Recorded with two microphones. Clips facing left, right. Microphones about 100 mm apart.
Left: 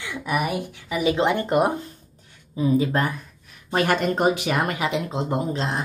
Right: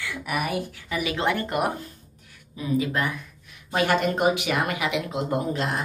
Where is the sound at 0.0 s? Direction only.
20° left (ahead or behind).